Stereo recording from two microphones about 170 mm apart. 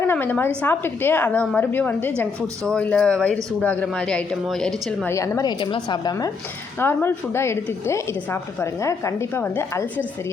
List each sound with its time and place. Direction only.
0.0 s a woman's voice: 10° left (ahead or behind)
5.1 s a woman's voice: 20° left (ahead or behind)